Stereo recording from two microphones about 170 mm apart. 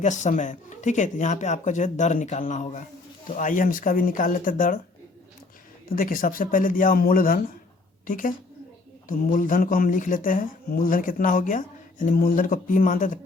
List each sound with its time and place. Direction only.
0.0 s speech: 45° left (ahead or behind)
5.9 s a woman's voice: 55° left (ahead or behind)